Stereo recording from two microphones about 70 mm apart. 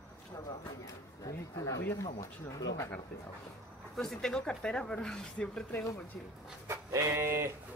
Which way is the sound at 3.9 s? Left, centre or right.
Centre.